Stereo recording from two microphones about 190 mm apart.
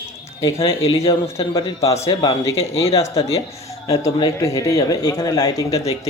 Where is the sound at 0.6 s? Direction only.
30° left (ahead or behind).